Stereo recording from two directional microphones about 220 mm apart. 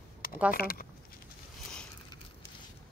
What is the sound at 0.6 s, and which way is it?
Speech, 40° left (ahead or behind).